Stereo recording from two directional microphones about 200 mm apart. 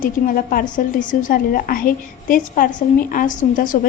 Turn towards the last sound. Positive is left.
turn(degrees=40)  # may be behind; listen again after turning